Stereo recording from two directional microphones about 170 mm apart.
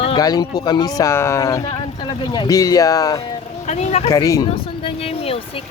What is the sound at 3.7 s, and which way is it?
Speech, 40° left (ahead or behind).